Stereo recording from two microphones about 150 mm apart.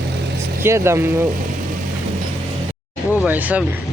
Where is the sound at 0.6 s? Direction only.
15° right (ahead or behind).